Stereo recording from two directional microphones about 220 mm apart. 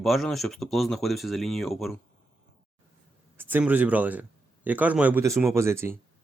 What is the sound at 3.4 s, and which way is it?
Speech, 10° right (ahead or behind).